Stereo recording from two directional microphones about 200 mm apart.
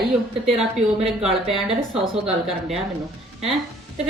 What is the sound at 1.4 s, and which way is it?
Speech, 30° right (ahead or behind).